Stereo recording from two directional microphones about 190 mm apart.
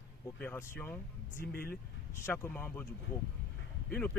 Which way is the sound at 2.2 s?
10° left (ahead or behind).